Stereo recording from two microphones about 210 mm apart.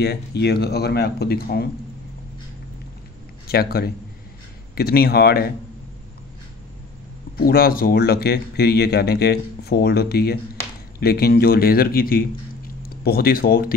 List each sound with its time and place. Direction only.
0.0 s speech: 50° left (ahead or behind)
3.4 s a man's voice: 45° left (ahead or behind)
7.3 s speech: 45° left (ahead or behind)